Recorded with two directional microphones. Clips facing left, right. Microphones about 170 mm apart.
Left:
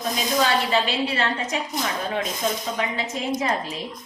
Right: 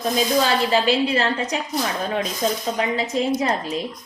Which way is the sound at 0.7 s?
35° right (ahead or behind).